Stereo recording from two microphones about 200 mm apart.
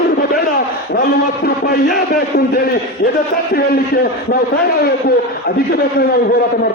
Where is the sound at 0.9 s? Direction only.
50° left (ahead or behind).